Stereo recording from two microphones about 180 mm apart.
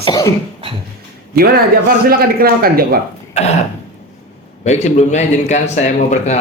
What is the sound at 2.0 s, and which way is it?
Speech, 55° right (ahead or behind).